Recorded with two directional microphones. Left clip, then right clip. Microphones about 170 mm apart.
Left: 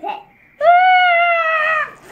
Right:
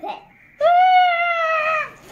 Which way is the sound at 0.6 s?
10° right (ahead or behind).